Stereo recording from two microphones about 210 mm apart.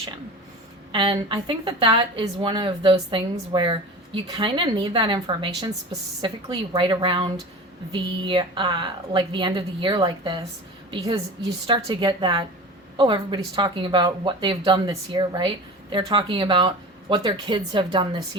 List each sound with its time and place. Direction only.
0.9 s a woman's voice: 25° right (ahead or behind)